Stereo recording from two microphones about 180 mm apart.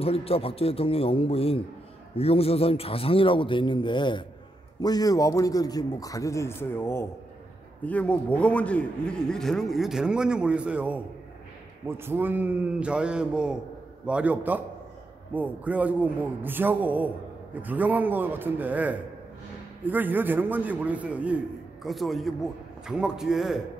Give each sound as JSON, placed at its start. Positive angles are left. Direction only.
{"t": 0.0, "sound": "a man's voice", "side_deg": 35}
{"t": 12.0, "sound": "a man's voice", "side_deg": -10}